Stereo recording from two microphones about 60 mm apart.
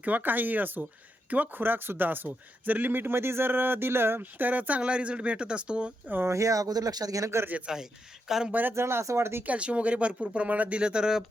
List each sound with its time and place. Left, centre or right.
0.0 s speech: right
6.2 s speech: right
7.7 s speech: centre
8.7 s speech: right
9.4 s speech: right